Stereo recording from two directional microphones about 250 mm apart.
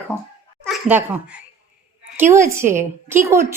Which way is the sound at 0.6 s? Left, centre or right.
Centre.